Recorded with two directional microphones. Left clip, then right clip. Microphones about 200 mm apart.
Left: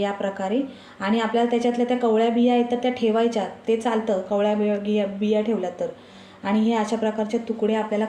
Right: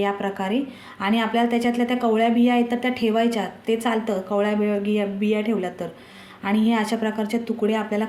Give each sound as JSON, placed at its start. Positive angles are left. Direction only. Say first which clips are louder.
{"t": 0.0, "sound": "speech", "louder": "right 1 dB", "side_deg": -50}